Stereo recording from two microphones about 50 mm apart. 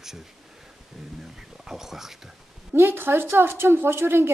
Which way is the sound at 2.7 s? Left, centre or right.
Right.